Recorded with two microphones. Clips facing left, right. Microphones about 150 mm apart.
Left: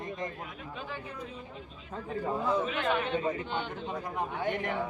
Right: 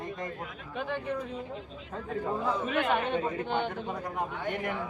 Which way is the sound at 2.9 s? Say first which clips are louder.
Right 1 dB; 55° right (ahead or behind).